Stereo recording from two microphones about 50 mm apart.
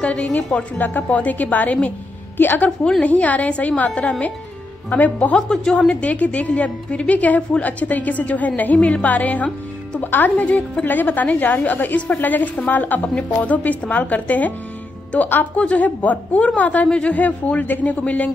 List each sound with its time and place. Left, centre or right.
0.0 s speech: left
0.7 s a woman's voice: left
3.0 s a woman's voice: left
5.3 s a woman's voice: centre; by 14.5 s left
15.5 s speech: left